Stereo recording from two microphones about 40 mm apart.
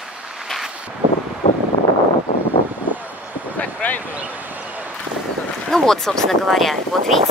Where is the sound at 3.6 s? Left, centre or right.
Left.